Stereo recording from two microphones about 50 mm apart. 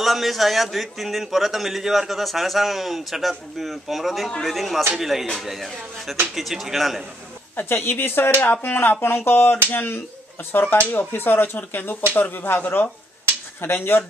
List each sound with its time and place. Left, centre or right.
0.0 s a man's voice: centre
7.5 s a woman's voice: left